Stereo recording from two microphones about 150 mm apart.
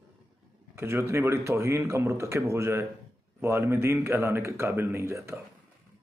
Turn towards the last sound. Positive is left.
turn(degrees=-20)  # may be behind; listen again after turning